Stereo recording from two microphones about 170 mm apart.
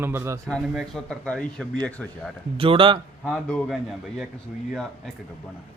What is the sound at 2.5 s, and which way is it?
Speech, 30° right (ahead or behind).